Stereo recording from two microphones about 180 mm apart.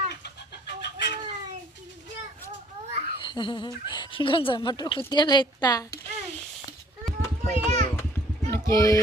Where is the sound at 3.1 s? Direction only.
25° left (ahead or behind).